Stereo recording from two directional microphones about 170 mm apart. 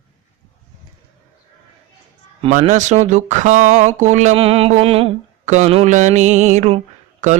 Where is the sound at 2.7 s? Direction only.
45° right (ahead or behind).